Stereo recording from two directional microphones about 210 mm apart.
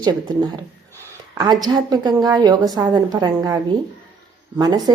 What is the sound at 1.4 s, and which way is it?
A woman's voice, 20° right (ahead or behind).